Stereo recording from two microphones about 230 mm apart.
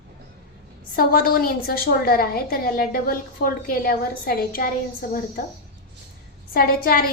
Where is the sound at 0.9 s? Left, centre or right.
Left.